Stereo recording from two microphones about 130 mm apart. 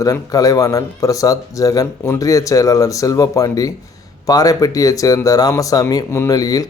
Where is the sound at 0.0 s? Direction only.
25° left (ahead or behind).